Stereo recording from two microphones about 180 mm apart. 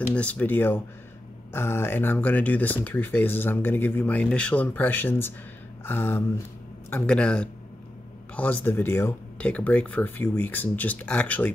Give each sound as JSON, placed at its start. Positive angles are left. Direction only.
{"t": 0.1, "sound": "speech", "side_deg": 10}